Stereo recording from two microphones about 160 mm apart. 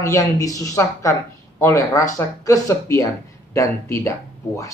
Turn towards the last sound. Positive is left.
turn(degrees=20)  # may be behind; listen again after turning